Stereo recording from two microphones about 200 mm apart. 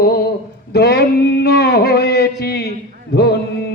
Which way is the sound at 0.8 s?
55° left (ahead or behind).